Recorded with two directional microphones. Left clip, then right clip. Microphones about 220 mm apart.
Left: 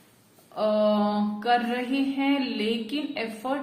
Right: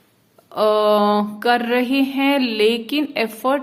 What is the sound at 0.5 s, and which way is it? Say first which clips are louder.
Mantra: right 8 dB; 50° right (ahead or behind).